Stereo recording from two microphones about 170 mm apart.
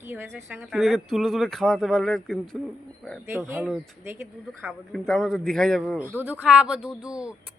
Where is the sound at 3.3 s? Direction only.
15° right (ahead or behind).